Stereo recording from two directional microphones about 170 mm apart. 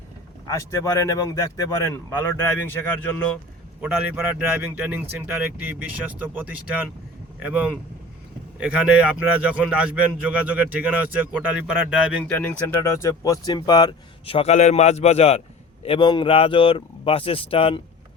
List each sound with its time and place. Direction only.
0.4 s speech: 20° left (ahead or behind)
3.8 s speech: 10° right (ahead or behind)
12.6 s speech: 15° left (ahead or behind); by 17.7 s 35° left (ahead or behind)